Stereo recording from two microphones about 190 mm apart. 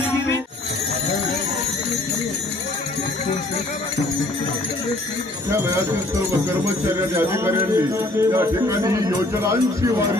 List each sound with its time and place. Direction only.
7.2 s a man's voice: 15° right (ahead or behind)